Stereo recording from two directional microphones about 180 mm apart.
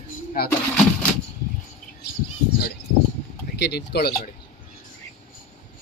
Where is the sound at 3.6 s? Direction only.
65° left (ahead or behind).